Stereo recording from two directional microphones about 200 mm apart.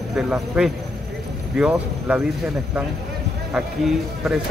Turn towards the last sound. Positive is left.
turn(degrees=0)  # may be behind; listen again after turning